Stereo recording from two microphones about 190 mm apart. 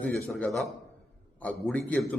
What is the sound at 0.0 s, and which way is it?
A man's voice, 5° left (ahead or behind).